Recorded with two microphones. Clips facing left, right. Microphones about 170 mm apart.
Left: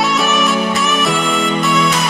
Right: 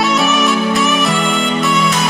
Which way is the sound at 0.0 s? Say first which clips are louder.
Right 1 dB; centre (ahead or behind).